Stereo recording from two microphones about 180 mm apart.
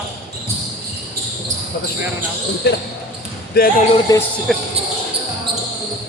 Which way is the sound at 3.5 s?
60° left (ahead or behind).